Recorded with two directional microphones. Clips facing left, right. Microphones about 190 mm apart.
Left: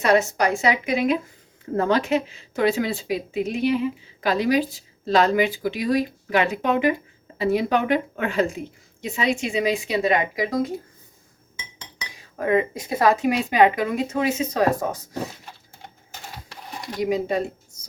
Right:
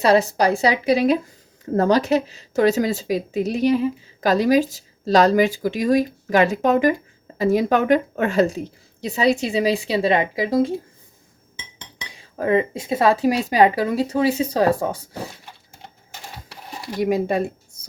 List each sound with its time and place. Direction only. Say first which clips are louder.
0.0 s speech: right 3 dB; 35° right (ahead or behind)
12.0 s speech: right 2 dB; 30° right (ahead or behind)
17.0 s speech: right 3 dB; 55° right (ahead or behind)